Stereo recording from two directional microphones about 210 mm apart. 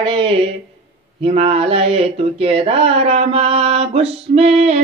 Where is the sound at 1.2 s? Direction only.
30° right (ahead or behind).